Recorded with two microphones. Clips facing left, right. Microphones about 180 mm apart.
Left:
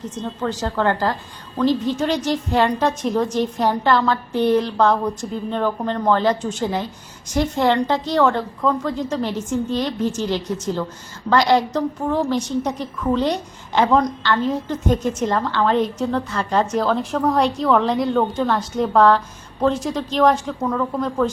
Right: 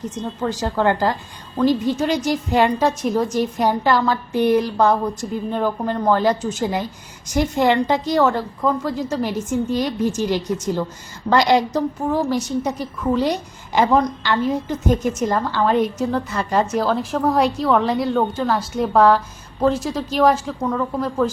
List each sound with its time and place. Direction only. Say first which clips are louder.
0.2 s a woman's voice: even; 10° right (ahead or behind)